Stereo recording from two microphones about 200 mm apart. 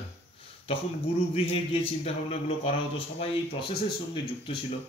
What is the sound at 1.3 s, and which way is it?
Speech, 30° left (ahead or behind).